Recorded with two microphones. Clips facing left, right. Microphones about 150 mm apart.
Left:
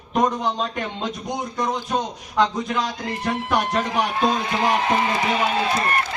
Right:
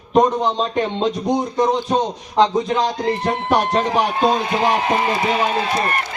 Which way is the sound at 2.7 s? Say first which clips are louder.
Right 7 dB; 35° right (ahead or behind).